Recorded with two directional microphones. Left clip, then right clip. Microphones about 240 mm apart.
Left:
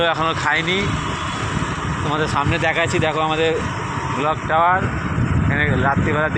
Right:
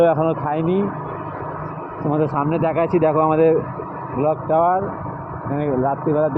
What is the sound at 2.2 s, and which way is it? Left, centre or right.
Speech, right.